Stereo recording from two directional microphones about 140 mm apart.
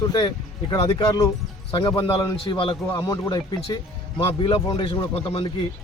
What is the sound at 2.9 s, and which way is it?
Speech, 25° left (ahead or behind).